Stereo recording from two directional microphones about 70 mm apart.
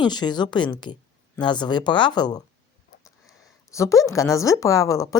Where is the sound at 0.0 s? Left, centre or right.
Left.